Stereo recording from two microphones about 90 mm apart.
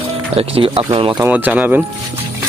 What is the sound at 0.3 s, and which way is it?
Speech, 90° right.